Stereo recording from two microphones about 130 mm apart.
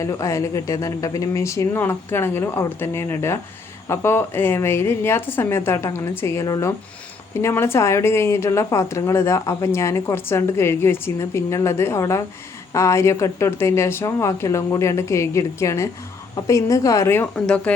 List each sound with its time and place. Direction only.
0.0 s a woman's voice: 25° left (ahead or behind)
17.3 s speech: 10° left (ahead or behind)